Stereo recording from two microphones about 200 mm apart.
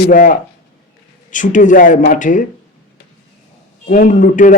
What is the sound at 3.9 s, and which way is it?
Speech, 40° left (ahead or behind).